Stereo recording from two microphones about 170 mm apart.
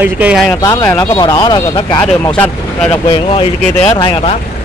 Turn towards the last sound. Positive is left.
turn(degrees=30)  # may be behind; listen again after turning